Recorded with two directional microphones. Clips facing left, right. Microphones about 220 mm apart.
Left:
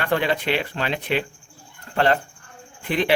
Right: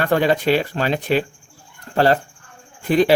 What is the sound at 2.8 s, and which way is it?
Speech, 40° right (ahead or behind).